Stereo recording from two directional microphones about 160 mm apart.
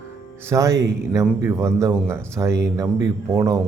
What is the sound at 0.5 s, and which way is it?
Speech, 20° right (ahead or behind).